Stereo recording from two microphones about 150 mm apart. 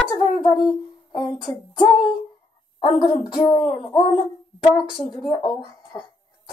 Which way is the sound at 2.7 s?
35° left (ahead or behind).